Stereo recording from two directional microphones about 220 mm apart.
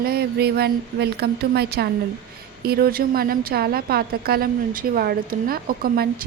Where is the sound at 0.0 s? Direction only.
45° right (ahead or behind).